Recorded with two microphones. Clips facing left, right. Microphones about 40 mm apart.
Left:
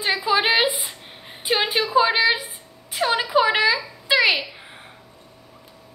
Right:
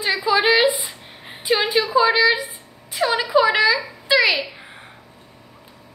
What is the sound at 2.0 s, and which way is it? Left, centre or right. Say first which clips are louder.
A woman's voice: right 2 dB; centre.